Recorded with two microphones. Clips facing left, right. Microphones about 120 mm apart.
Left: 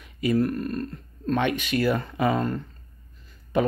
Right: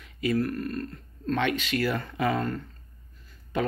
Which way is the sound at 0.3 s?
20° left (ahead or behind).